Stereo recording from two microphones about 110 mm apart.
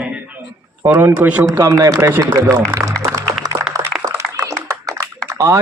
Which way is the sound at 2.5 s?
30° right (ahead or behind).